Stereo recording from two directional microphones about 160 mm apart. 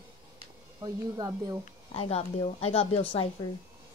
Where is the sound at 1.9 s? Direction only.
40° left (ahead or behind).